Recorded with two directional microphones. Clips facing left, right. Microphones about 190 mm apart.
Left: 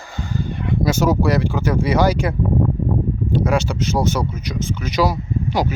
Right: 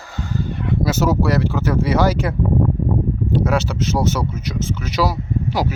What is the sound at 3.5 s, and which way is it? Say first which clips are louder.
Speech: even; 5° right (ahead or behind).